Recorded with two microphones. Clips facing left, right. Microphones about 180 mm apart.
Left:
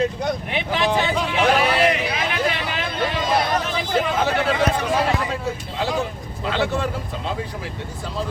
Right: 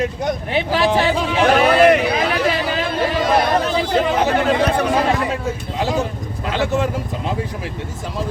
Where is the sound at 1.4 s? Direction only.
50° right (ahead or behind).